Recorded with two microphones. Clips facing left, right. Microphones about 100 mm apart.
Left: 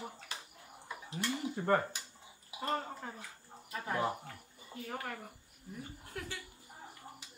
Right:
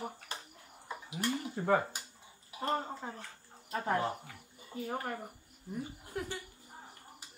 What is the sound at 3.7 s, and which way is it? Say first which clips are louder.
Speech: right 6 dB; 35° right (ahead or behind).